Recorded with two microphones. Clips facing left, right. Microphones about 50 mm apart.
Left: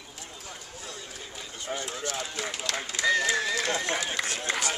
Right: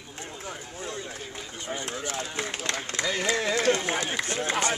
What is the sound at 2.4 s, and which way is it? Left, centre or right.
Speech, right.